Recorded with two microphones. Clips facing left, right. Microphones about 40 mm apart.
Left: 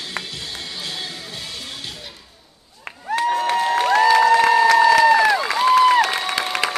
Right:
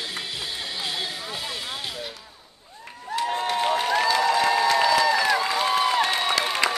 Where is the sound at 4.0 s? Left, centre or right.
Left.